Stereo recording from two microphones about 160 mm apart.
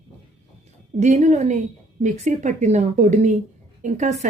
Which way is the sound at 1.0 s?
45° right (ahead or behind).